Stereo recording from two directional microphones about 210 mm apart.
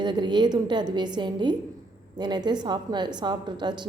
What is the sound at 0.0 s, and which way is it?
A woman's voice, 20° right (ahead or behind).